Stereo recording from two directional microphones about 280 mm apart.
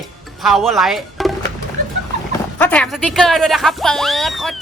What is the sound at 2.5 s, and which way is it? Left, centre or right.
Speech, centre.